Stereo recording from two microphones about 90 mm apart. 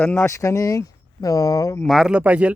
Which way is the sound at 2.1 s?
15° right (ahead or behind).